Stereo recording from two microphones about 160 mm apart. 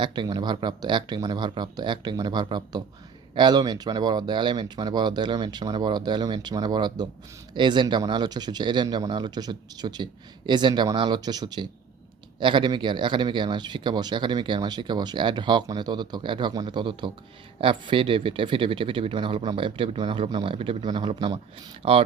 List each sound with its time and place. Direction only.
0.0 s speech: 25° right (ahead or behind)